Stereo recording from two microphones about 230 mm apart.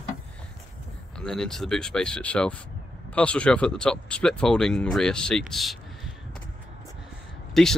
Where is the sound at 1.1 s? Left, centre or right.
Centre.